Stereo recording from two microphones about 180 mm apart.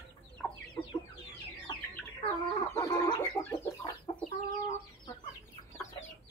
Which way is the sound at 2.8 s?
20° left (ahead or behind).